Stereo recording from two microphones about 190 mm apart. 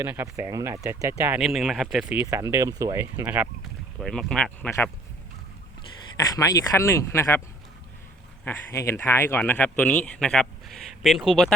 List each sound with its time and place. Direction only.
0.0 s speech: 10° right (ahead or behind)
1.2 s speech: 5° right (ahead or behind)
2.2 s speech: 15° right (ahead or behind)
4.0 s speech: 5° left (ahead or behind)
6.1 s speech: 20° left (ahead or behind)
8.4 s speech: 15° left (ahead or behind); by 11.5 s centre (ahead or behind)